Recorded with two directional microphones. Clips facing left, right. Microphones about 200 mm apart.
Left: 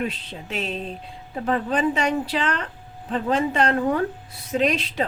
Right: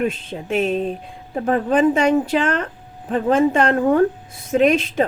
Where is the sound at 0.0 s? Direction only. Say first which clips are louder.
Right 6 dB; 50° right (ahead or behind).